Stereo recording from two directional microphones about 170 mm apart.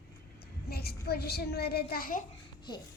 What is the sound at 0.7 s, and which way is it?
A child's voice, 70° left (ahead or behind).